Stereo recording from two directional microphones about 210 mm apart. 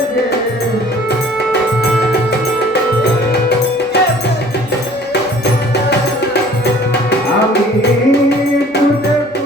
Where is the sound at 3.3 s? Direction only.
50° left (ahead or behind).